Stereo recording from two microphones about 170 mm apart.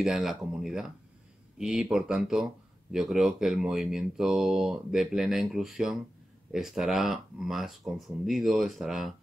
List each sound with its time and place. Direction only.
0.0 s speech: 5° right (ahead or behind)